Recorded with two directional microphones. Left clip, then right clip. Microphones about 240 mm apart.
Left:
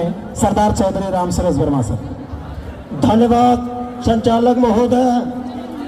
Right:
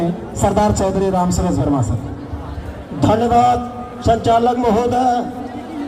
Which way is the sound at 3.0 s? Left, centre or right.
Left.